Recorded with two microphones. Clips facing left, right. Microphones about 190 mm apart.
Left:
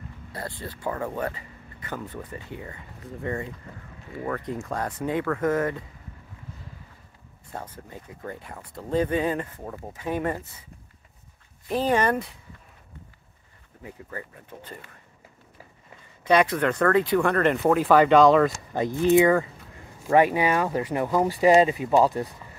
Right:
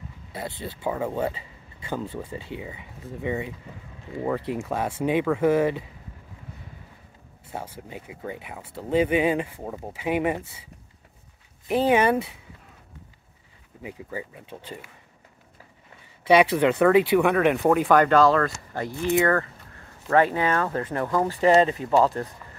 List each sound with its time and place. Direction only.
0.3 s speech: 20° right (ahead or behind)
0.8 s speech: 10° right (ahead or behind)
1.1 s a sound: 25° right (ahead or behind)
2.0 s speech: 25° right (ahead or behind)
2.6 s speech: 10° right (ahead or behind)
7.5 s speech: 10° right (ahead or behind)
11.9 s speech: 10° right (ahead or behind)
13.8 s speech: 15° right (ahead or behind)
16.3 s speech: 10° right (ahead or behind)
18.7 s speech: 20° left (ahead or behind)